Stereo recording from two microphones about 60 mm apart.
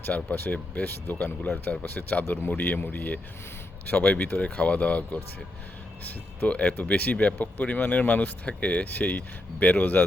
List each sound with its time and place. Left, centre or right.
0.0 s speech: left
6.5 s speech: left